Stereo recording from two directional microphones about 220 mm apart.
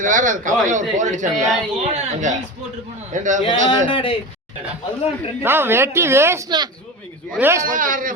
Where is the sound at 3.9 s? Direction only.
25° left (ahead or behind).